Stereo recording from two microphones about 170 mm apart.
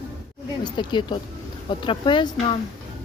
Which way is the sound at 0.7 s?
25° left (ahead or behind).